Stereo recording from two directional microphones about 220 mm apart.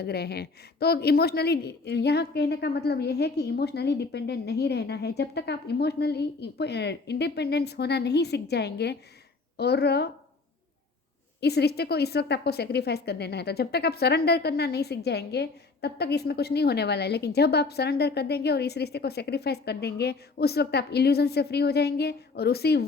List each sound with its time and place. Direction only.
0.0 s a woman's voice: 45° left (ahead or behind)
11.3 s a woman's voice: 45° left (ahead or behind)